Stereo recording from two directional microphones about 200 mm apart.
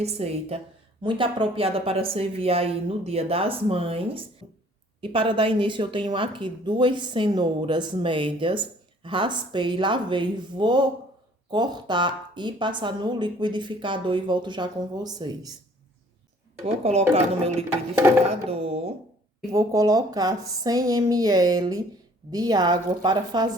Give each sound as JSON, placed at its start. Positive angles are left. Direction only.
{"t": 0.0, "sound": "a woman's voice", "side_deg": -30}
{"t": 16.6, "sound": "a woman's voice", "side_deg": -30}
{"t": 19.5, "sound": "speech", "side_deg": -15}